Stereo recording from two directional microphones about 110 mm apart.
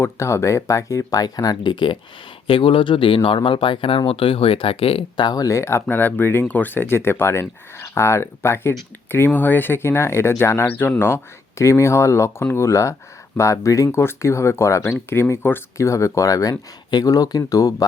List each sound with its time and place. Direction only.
0.0 s speech: 25° left (ahead or behind); by 5.2 s 60° left (ahead or behind)
5.2 s speech: 35° left (ahead or behind)